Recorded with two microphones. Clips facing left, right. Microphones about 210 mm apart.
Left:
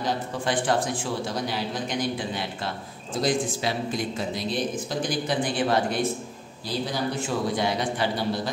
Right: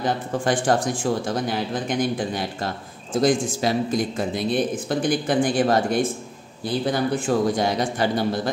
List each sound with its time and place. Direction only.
0.0 s speech: 45° right (ahead or behind)